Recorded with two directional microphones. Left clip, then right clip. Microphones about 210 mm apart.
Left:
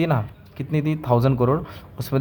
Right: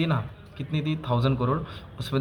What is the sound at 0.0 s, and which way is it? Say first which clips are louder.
Speech: left 6 dB; 45° left (ahead or behind).